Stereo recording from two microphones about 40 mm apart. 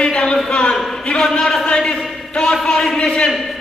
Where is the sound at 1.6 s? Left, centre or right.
Left.